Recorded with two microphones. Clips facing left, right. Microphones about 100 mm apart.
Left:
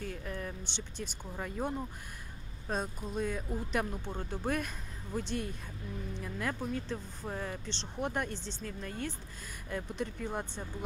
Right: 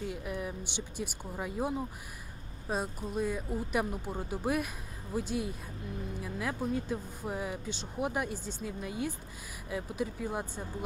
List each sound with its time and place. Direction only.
0.0 s speech: 10° right (ahead or behind)